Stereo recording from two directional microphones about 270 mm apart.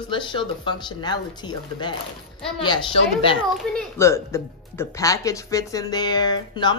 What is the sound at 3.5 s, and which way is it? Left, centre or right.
Speech, centre.